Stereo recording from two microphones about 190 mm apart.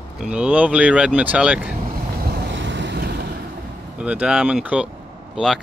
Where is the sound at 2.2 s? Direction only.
60° right (ahead or behind).